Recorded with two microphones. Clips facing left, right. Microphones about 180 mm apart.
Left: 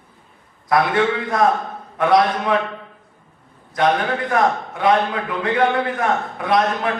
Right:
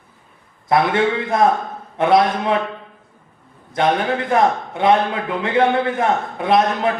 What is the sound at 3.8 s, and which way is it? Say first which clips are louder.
A man's voice: right 1 dB; 25° right (ahead or behind).